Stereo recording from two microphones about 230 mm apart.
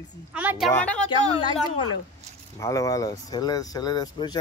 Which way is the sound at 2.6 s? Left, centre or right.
Centre.